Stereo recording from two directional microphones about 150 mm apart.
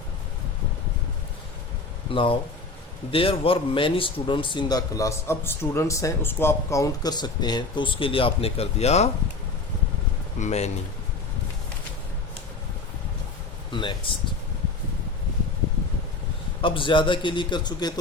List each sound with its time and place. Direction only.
2.1 s a man's voice: 35° left (ahead or behind)
10.4 s speech: 45° left (ahead or behind)
13.7 s speech: 30° left (ahead or behind)
16.6 s a man's voice: 35° left (ahead or behind)